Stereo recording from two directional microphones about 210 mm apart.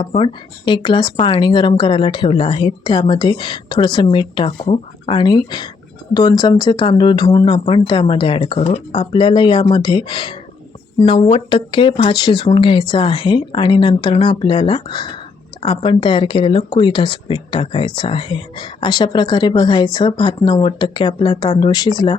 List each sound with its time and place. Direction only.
0.0 s speech: 25° left (ahead or behind)